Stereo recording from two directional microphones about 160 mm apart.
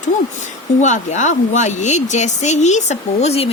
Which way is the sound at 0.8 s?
50° left (ahead or behind).